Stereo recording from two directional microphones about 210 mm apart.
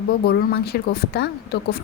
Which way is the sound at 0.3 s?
50° left (ahead or behind).